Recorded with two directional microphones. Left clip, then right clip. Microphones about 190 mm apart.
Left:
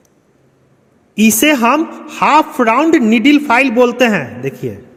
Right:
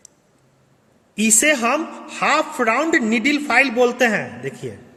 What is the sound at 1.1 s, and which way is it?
A man's voice, 30° left (ahead or behind).